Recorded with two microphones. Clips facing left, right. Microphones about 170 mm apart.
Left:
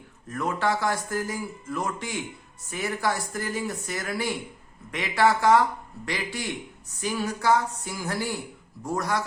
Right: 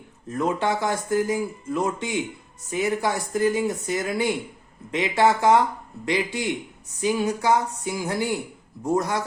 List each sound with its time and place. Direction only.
0.3 s speech: 20° right (ahead or behind)